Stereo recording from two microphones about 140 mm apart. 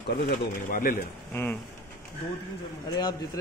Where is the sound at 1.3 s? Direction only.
15° left (ahead or behind).